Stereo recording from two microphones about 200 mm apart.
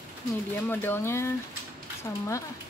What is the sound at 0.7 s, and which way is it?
Speech, 10° left (ahead or behind).